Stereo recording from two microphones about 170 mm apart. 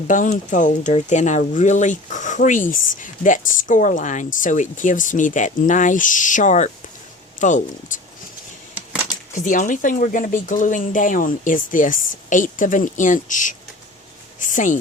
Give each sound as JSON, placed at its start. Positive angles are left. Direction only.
{"t": 0.1, "sound": "speech", "side_deg": 50}
{"t": 9.3, "sound": "speech", "side_deg": 50}